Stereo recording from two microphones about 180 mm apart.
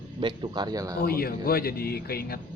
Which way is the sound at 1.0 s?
55° left (ahead or behind).